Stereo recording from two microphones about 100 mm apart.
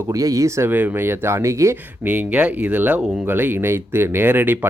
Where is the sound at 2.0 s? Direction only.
15° right (ahead or behind).